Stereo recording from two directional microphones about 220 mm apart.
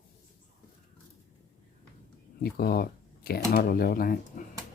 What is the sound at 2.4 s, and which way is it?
Speech, 45° left (ahead or behind).